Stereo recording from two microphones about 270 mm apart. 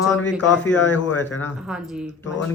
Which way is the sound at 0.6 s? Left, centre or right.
Left.